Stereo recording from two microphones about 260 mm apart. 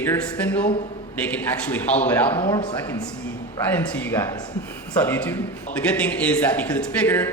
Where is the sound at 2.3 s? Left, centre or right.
Centre.